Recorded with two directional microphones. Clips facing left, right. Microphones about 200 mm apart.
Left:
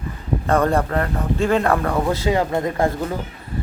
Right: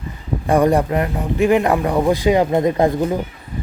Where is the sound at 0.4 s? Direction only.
15° right (ahead or behind).